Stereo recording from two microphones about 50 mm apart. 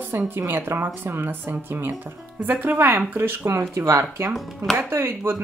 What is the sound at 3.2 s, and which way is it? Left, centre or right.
Speech, right.